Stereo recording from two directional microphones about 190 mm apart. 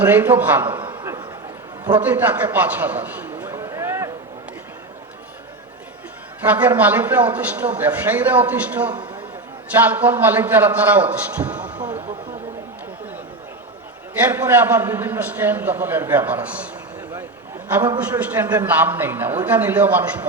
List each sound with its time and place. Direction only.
0.0 s a man's voice: 10° right (ahead or behind)
0.8 s a sound: 20° right (ahead or behind)
1.8 s a sound: 10° right (ahead or behind)
6.4 s a man's voice: 10° right (ahead or behind)
14.3 s a man's voice: 10° right (ahead or behind)
18.0 s a man's voice: 10° right (ahead or behind)